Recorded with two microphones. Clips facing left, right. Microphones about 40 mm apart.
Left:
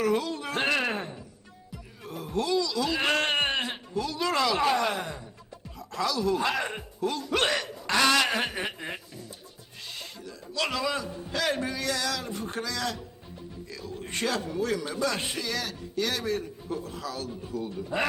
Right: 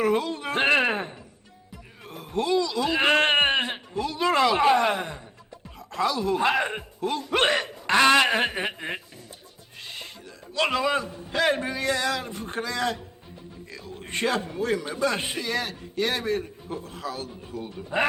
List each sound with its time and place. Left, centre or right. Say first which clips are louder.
0.0 s a man's voice: right 3 dB; right